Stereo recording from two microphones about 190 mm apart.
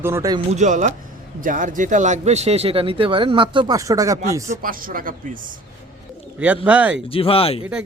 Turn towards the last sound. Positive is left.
turn(degrees=30)  # may be behind; listen again after turning